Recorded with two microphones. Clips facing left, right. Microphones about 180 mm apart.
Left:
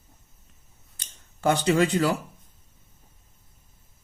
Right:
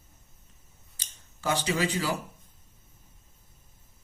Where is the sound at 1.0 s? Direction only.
60° left (ahead or behind).